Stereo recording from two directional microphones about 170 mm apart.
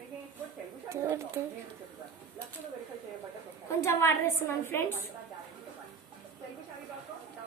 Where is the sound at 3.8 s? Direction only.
15° left (ahead or behind).